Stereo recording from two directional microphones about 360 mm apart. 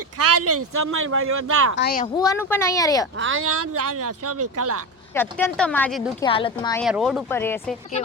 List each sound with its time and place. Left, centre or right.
0.2 s speech: right
1.7 s speech: left
2.1 s speech: centre
3.2 s speech: right
5.1 s speech: centre
6.8 s speech: centre